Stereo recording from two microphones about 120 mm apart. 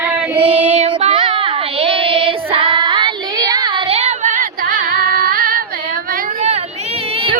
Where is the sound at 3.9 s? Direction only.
65° right (ahead or behind).